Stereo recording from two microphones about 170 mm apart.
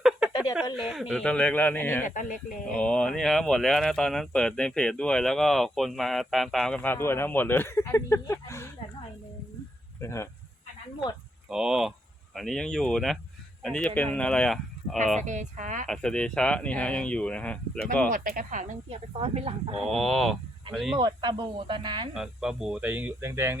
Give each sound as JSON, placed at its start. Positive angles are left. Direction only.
{"t": 0.5, "sound": "speech", "side_deg": 0}
{"t": 2.0, "sound": "speech", "side_deg": 50}
{"t": 2.6, "sound": "speech", "side_deg": 5}
{"t": 10.0, "sound": "speech", "side_deg": 15}
{"t": 11.4, "sound": "speech", "side_deg": -5}
{"t": 15.2, "sound": "speech", "side_deg": -45}
{"t": 15.9, "sound": "speech", "side_deg": 5}
{"t": 18.1, "sound": "speech", "side_deg": -55}
{"t": 19.8, "sound": "speech", "side_deg": 0}
{"t": 21.0, "sound": "speech", "side_deg": -25}
{"t": 22.1, "sound": "speech", "side_deg": -5}